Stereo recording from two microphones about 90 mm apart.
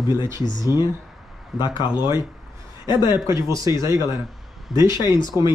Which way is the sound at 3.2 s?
35° right (ahead or behind).